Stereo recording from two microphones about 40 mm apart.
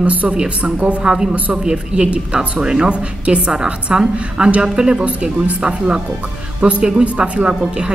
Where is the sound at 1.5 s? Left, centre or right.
Right.